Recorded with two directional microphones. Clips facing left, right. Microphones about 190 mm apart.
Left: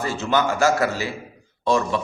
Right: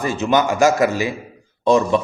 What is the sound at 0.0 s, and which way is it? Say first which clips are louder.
A man's voice: right 4 dB; 15° right (ahead or behind).